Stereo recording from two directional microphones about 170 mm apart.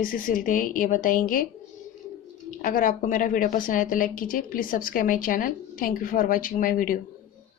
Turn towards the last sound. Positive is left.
turn(degrees=55)  # may be behind; listen again after turning